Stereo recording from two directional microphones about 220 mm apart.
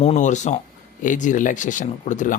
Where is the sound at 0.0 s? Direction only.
30° left (ahead or behind).